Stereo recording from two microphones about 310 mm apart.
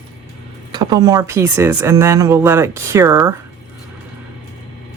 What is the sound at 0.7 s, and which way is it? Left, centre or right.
Speech, centre.